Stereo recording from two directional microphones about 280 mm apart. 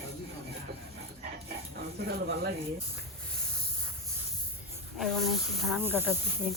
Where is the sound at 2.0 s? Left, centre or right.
Right.